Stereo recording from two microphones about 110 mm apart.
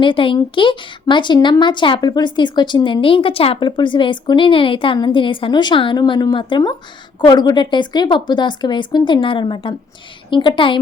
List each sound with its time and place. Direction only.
0.0 s speech: 50° left (ahead or behind)
3.7 s speech: 45° left (ahead or behind)